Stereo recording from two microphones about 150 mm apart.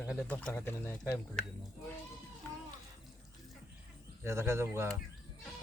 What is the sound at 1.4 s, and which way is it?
Speech, 5° left (ahead or behind).